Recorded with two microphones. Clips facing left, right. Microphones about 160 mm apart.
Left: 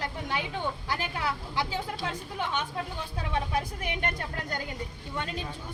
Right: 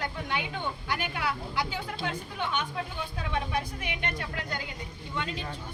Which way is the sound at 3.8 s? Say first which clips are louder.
Left 2 dB; 45° left (ahead or behind).